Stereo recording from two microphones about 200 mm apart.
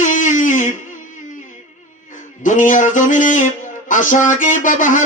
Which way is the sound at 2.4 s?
40° left (ahead or behind).